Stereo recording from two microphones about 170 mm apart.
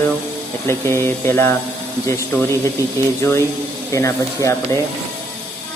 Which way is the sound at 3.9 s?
20° left (ahead or behind).